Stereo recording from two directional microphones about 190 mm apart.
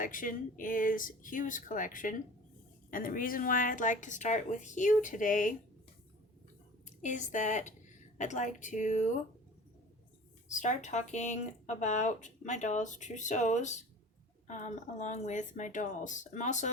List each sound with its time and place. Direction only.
0.0 s speech: 45° left (ahead or behind)
7.0 s speech: 40° left (ahead or behind)
10.5 s speech: 40° left (ahead or behind)